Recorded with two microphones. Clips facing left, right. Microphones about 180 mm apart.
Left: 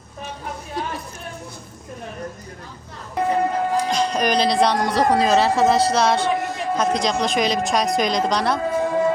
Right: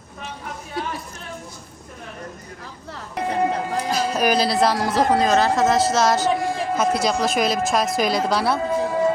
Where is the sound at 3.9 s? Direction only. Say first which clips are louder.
Even; 5° right (ahead or behind).